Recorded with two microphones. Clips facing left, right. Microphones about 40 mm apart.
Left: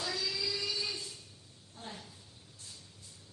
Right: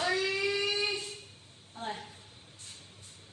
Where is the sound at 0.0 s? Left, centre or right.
Right.